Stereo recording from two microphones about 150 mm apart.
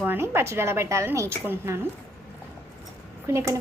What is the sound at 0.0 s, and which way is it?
A woman's voice, 15° right (ahead or behind).